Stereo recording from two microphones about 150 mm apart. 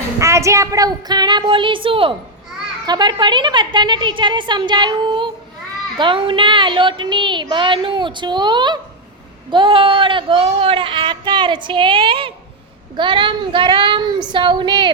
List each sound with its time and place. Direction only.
0.2 s a woman's voice: 20° right (ahead or behind)